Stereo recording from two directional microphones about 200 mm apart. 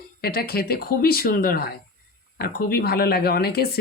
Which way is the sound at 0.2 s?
50° left (ahead or behind).